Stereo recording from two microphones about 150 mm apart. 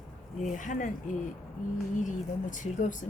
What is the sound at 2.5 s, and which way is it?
Speech, 55° left (ahead or behind).